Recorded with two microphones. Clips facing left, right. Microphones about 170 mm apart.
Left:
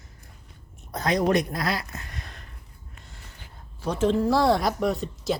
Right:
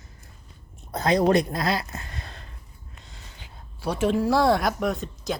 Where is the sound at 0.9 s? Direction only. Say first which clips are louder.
Right 3 dB; 30° right (ahead or behind).